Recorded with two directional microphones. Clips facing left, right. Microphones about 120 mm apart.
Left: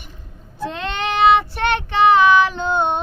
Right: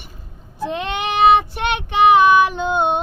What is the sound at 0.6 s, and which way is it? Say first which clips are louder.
Child singing: right 2 dB; 15° right (ahead or behind).